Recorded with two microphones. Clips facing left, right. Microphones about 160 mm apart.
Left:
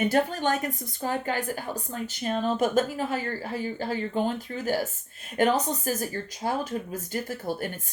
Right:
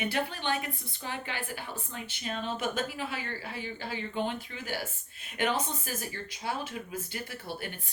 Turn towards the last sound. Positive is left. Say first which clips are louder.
# left 8 dB
turn(degrees=45)  # may be behind; listen again after turning